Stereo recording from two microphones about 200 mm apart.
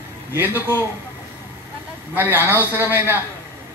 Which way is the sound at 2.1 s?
10° right (ahead or behind).